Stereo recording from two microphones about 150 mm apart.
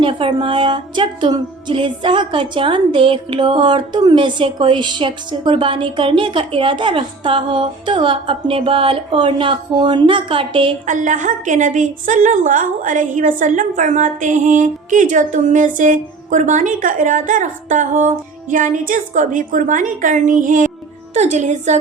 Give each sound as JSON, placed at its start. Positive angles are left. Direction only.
{"t": 0.0, "sound": "music", "side_deg": -35}
{"t": 10.8, "sound": "a woman's voice", "side_deg": -55}
{"t": 21.1, "sound": "a woman's voice", "side_deg": -50}